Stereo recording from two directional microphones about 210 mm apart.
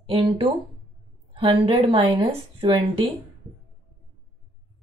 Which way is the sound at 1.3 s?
25° right (ahead or behind).